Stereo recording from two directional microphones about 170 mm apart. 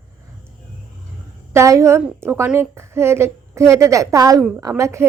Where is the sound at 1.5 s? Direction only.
15° right (ahead or behind).